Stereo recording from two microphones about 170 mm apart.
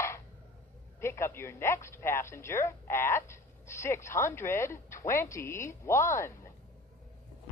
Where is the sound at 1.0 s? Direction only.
15° left (ahead or behind).